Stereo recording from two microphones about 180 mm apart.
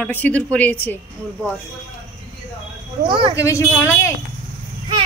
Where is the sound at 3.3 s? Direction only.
15° left (ahead or behind).